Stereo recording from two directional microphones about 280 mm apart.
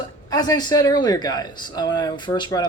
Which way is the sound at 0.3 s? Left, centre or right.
Centre.